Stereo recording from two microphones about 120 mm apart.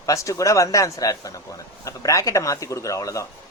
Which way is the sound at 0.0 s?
25° left (ahead or behind).